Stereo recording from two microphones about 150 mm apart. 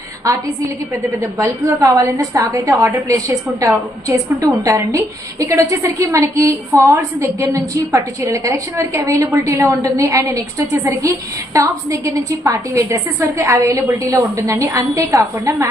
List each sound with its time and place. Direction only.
1.2 s a woman's voice: 20° right (ahead or behind)
11.5 s a woman's voice: 20° right (ahead or behind)